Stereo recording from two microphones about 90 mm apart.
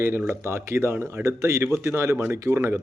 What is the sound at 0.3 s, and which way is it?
A man's voice, 30° right (ahead or behind).